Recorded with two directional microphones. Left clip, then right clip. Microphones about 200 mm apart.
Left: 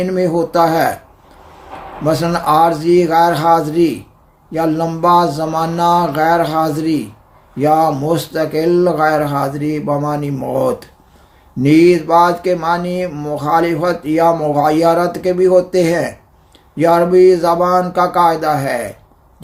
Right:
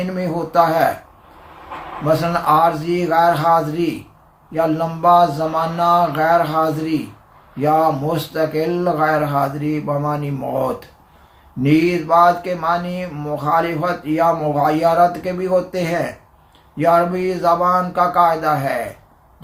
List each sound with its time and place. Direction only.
0.0 s speech: 45° left (ahead or behind)
2.2 s speech: 45° left (ahead or behind)